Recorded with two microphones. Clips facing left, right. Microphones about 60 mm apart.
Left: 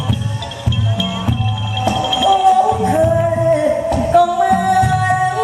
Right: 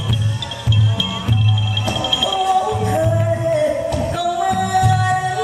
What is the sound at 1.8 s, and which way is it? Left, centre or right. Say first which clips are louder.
Music: left 8 dB; left.